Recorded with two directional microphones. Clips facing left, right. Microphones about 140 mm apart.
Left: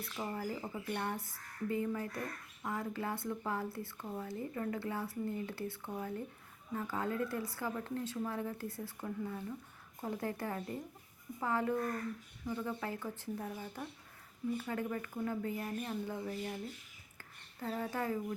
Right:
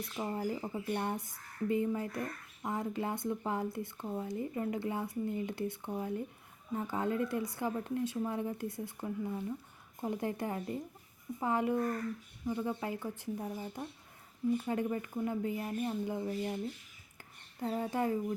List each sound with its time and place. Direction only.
0.0 s speech: 20° right (ahead or behind)